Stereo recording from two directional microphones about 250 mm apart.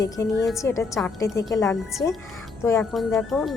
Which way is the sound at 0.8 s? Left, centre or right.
Centre.